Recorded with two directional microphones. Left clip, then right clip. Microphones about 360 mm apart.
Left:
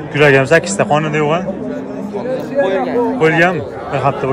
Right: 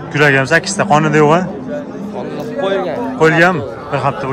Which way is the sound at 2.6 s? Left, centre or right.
Right.